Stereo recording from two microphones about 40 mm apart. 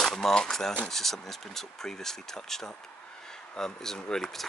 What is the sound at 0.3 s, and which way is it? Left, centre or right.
Speech, centre.